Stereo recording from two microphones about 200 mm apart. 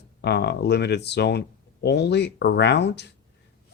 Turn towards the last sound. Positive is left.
turn(degrees=55)  # may be behind; listen again after turning